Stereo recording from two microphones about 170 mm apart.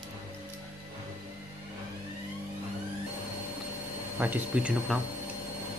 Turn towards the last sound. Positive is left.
turn(degrees=-5)  # may be behind; listen again after turning